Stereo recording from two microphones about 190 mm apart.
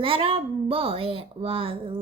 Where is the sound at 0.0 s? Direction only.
30° right (ahead or behind).